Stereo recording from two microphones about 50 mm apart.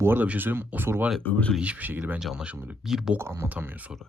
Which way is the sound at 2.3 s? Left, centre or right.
Right.